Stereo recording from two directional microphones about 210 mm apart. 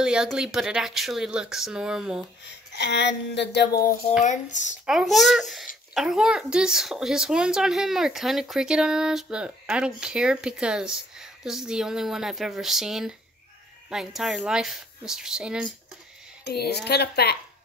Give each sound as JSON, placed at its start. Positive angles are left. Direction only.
{"t": 0.0, "sound": "speech", "side_deg": -5}
{"t": 2.4, "sound": "a woman's voice", "side_deg": 50}
{"t": 4.2, "sound": "speech", "side_deg": 35}
{"t": 4.8, "sound": "speech", "side_deg": 0}
{"t": 16.8, "sound": "a woman's voice", "side_deg": 50}